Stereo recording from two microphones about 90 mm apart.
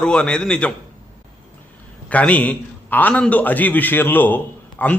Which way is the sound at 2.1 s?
15° left (ahead or behind).